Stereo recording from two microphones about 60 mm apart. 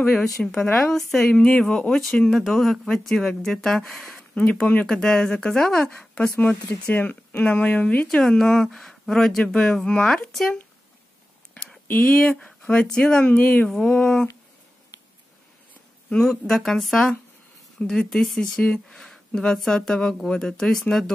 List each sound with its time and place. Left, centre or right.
0.2 s speech: centre
8.1 s speech: centre
11.5 s a sound: centre
12.0 s speech: centre
13.7 s speech: centre
16.1 s speech: centre